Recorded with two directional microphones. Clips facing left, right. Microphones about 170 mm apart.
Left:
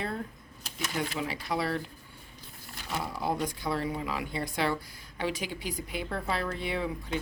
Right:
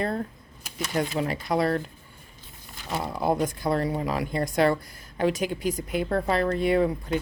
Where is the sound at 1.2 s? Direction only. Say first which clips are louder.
Right 7 dB; 45° right (ahead or behind).